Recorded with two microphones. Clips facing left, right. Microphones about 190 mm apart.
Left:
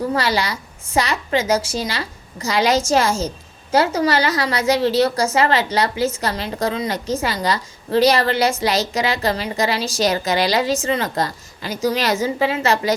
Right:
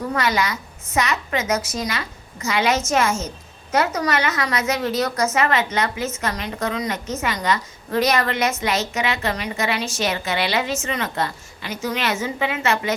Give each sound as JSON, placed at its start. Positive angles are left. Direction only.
{"t": 0.1, "sound": "a woman's voice", "side_deg": 30}